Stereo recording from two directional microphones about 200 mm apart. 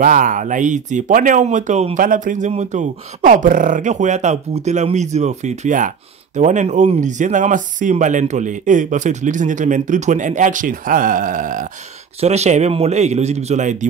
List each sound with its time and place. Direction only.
0.0 s speech: 40° right (ahead or behind)